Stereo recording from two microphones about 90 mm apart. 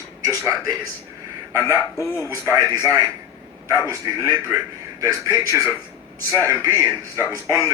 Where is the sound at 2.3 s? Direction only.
40° right (ahead or behind).